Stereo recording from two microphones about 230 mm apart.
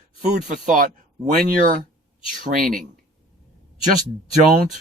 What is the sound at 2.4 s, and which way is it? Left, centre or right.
Speech, right.